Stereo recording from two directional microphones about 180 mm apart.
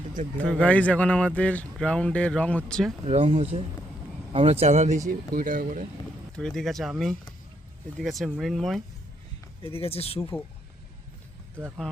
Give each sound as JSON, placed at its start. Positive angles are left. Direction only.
{"t": 0.1, "sound": "speech", "side_deg": -45}
{"t": 0.4, "sound": "speech", "side_deg": 5}
{"t": 3.1, "sound": "speech", "side_deg": -35}
{"t": 5.0, "sound": "speech", "side_deg": -50}
{"t": 6.3, "sound": "speech", "side_deg": 5}
{"t": 9.6, "sound": "speech", "side_deg": 30}
{"t": 10.2, "sound": "speech", "side_deg": 15}